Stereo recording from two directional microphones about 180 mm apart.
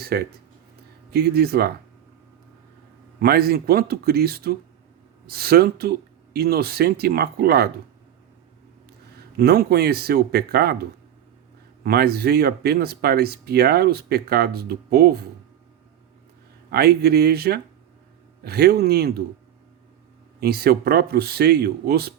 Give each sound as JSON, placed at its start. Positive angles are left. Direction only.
{"t": 0.0, "sound": "speech", "side_deg": -60}
{"t": 3.2, "sound": "speech", "side_deg": -60}
{"t": 9.4, "sound": "speech", "side_deg": -60}
{"t": 16.7, "sound": "speech", "side_deg": -60}
{"t": 20.4, "sound": "speech", "side_deg": -60}